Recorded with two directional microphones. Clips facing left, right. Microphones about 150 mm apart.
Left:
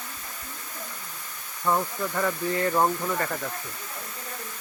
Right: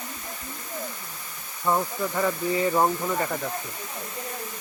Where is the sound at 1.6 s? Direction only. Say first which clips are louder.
Right 1 dB; 10° right (ahead or behind).